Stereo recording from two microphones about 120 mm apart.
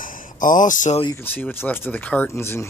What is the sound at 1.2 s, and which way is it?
Speech, 15° left (ahead or behind).